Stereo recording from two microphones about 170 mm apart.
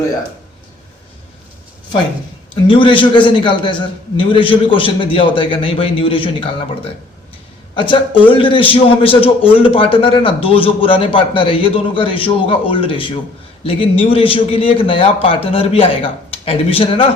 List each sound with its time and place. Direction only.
2.6 s a man's voice: 30° left (ahead or behind)